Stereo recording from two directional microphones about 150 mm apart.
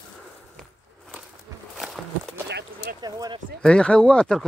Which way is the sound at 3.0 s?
25° right (ahead or behind).